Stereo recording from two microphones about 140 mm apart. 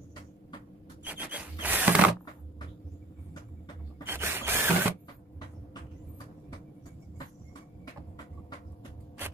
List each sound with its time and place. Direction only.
1.0 s rub: 10° right (ahead or behind)
4.0 s mechanisms: 15° right (ahead or behind)